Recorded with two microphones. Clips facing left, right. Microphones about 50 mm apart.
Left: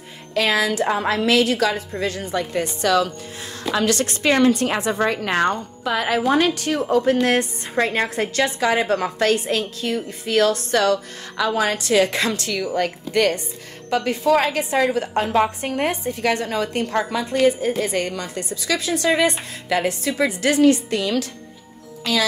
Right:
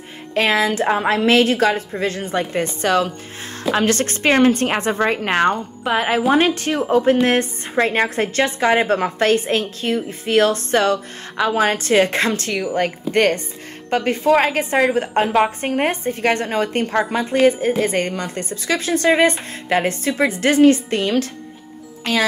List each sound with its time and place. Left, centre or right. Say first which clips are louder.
0.3 s a woman's voice: right 2 dB; right